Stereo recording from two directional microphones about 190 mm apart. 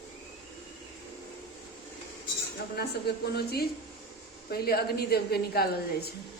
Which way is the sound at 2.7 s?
55° left (ahead or behind).